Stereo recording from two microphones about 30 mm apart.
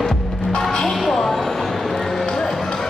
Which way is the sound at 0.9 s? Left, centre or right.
Centre.